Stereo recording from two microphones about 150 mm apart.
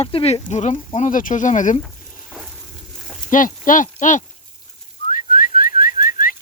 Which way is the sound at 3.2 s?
60° left (ahead or behind).